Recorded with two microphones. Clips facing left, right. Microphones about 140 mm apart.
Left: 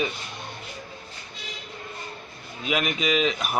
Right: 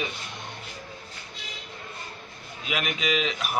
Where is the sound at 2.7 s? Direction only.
35° left (ahead or behind).